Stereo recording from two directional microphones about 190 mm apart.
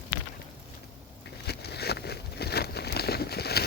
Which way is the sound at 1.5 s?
60° left (ahead or behind).